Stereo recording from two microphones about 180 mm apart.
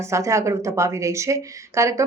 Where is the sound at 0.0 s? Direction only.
15° right (ahead or behind).